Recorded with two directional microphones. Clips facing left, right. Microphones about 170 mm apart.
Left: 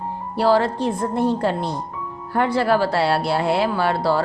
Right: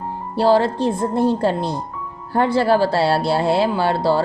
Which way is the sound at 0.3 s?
30° right (ahead or behind).